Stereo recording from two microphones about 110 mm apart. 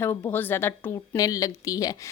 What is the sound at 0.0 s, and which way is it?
Speech, 20° left (ahead or behind).